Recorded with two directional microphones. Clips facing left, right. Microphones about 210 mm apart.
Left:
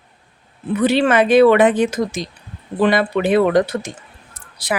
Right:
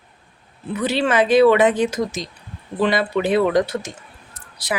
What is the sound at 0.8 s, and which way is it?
A woman's voice, 55° left (ahead or behind).